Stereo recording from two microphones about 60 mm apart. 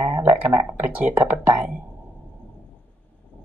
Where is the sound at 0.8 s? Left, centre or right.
Right.